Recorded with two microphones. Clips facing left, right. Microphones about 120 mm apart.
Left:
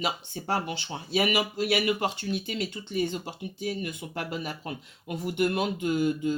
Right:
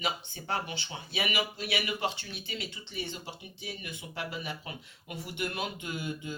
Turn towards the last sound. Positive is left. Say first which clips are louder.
# left 11 dB
turn(degrees=45)  # may be behind; listen again after turning